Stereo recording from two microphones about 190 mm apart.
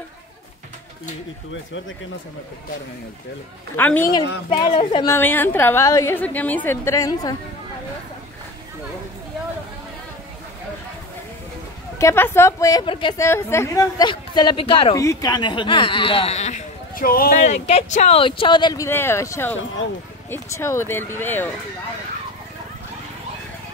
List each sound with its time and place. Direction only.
3.7 s a woman's voice: 10° left (ahead or behind)
4.5 s speech: 25° left (ahead or behind)
5.0 s a woman's voice: 10° left (ahead or behind)
12.0 s a woman's voice: 15° left (ahead or behind)
13.2 s a woman's voice: 15° left (ahead or behind)